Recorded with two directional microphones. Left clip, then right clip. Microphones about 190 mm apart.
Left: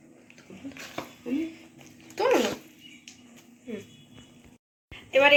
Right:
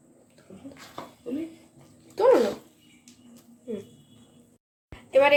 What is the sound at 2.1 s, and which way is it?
Dog, 20° right (ahead or behind).